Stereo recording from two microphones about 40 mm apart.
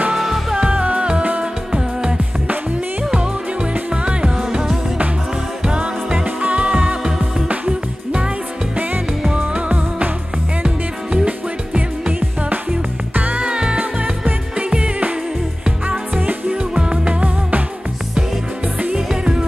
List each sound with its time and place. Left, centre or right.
0.2 s music: centre
0.6 s music: right
3.9 s music: right
9.3 s music: right
13.1 s music: right
13.4 s music: right
13.7 s music: right
16.2 s music: right
16.5 s music: right
18.9 s music: centre